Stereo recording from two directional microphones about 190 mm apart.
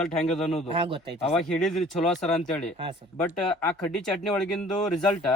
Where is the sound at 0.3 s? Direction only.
Centre (ahead or behind).